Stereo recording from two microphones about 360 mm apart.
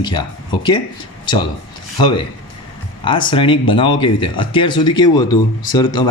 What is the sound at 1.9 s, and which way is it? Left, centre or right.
Speech, centre.